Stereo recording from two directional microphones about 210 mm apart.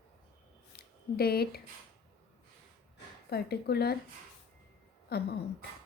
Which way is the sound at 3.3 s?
50° left (ahead or behind).